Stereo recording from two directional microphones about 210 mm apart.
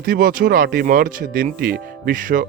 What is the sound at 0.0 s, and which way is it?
Speech, 45° right (ahead or behind).